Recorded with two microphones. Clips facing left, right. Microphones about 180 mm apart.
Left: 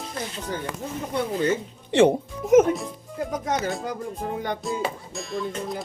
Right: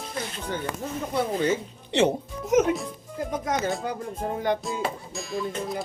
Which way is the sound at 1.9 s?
55° left (ahead or behind).